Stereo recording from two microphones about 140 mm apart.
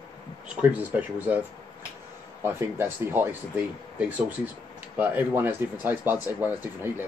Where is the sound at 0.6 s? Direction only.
10° right (ahead or behind).